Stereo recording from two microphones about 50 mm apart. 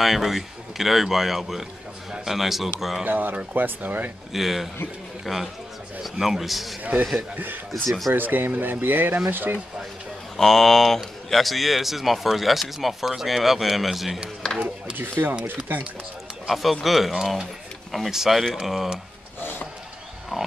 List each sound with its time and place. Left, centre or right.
0.0 s speech: centre
3.1 s speech: right
4.3 s speech: centre
6.8 s speech: right
7.7 s speech: centre
8.1 s speech: right
10.3 s speech: centre
15.0 s speech: right
16.4 s speech: centre
20.3 s pig: centre